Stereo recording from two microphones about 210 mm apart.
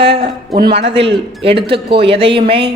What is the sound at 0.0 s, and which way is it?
Speech, 50° right (ahead or behind).